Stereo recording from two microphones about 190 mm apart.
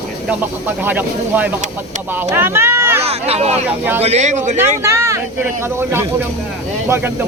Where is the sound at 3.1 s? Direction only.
35° right (ahead or behind).